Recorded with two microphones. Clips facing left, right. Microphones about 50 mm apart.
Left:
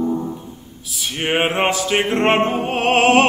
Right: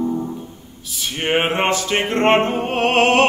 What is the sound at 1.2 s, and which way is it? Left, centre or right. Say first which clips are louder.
Music: even; centre.